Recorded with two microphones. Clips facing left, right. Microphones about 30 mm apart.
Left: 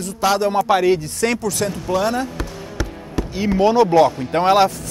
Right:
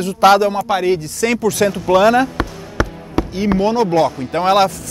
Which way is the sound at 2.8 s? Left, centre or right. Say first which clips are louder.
Right 8 dB; centre.